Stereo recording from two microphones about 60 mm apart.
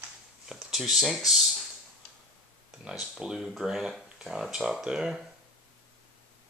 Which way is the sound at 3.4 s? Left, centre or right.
Centre.